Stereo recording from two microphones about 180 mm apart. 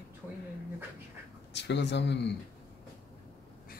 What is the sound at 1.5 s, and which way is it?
Speech, 75° left (ahead or behind).